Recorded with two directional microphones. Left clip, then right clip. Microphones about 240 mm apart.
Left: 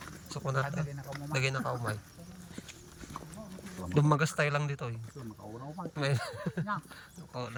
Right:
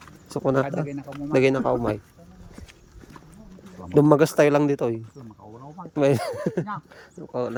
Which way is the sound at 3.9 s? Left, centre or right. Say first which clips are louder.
Right 13 dB; right.